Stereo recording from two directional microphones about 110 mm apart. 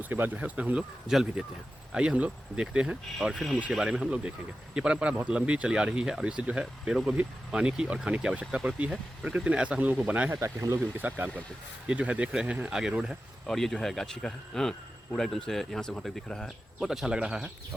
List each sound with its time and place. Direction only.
0.0 s speech: 15° right (ahead or behind)
10.4 s speech: 25° right (ahead or behind)
11.9 s speech: 10° right (ahead or behind)